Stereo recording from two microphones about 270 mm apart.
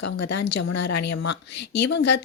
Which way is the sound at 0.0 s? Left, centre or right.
Left.